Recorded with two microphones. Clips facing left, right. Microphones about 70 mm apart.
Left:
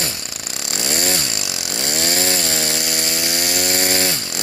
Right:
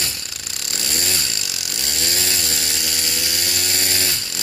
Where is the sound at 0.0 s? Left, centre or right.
Left.